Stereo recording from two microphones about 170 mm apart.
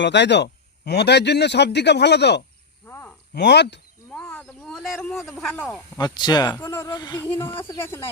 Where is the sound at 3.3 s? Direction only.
90° left.